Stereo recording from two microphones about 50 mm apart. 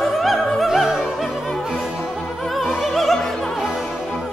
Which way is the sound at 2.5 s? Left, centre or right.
Centre.